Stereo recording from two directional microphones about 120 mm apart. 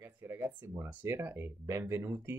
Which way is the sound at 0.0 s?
20° right (ahead or behind).